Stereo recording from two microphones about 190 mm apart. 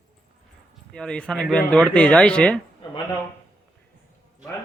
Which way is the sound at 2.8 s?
25° left (ahead or behind).